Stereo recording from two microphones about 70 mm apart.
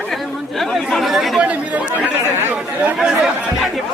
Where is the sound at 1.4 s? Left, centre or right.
Right.